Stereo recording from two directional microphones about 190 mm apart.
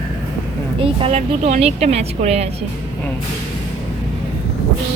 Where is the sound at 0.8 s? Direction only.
30° right (ahead or behind).